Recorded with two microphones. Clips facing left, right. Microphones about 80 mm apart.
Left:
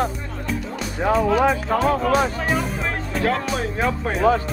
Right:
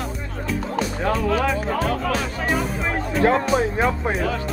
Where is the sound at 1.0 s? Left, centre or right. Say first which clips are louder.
Left 5 dB; centre.